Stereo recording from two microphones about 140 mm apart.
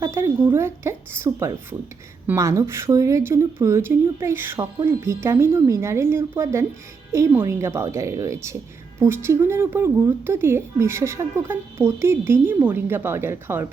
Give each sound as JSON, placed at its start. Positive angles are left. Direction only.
{"t": 0.0, "sound": "speech", "side_deg": -20}